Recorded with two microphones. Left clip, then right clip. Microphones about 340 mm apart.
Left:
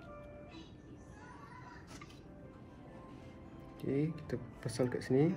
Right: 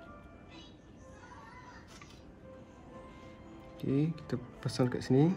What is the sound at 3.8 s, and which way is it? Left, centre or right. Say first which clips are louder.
Speech: right 3 dB; right.